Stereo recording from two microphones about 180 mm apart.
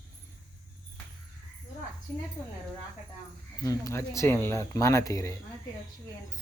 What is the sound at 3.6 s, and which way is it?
Speech, 15° left (ahead or behind).